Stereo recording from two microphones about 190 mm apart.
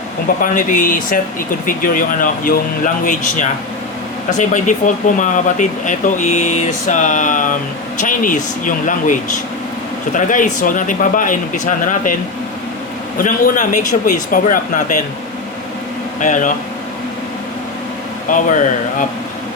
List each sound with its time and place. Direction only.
0.4 s speech: 45° left (ahead or behind)
13.1 s speech: 45° left (ahead or behind)
16.2 s speech: 40° left (ahead or behind)
18.3 s speech: 45° left (ahead or behind)